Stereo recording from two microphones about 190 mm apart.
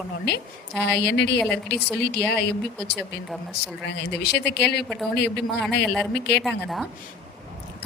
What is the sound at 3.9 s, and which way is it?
Speech, 60° left (ahead or behind).